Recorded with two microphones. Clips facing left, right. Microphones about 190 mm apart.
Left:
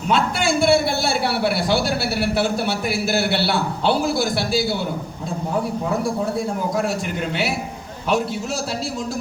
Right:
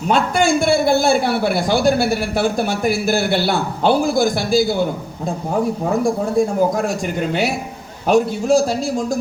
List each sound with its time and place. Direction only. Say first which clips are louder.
0.1 s a man's voice: right 4 dB; 45° right (ahead or behind)
8.0 s a man's voice: right 7 dB; 45° right (ahead or behind)